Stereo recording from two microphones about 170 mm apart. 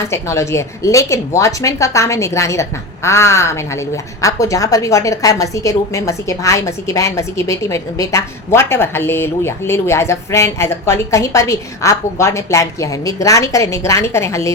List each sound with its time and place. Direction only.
0.0 s a woman's voice: 15° left (ahead or behind)